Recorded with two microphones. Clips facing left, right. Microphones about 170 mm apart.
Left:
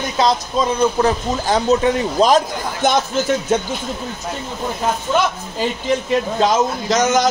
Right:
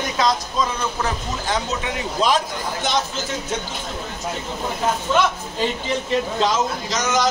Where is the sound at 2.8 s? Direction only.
50° left (ahead or behind).